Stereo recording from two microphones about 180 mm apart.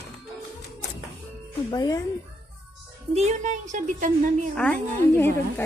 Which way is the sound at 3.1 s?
40° right (ahead or behind).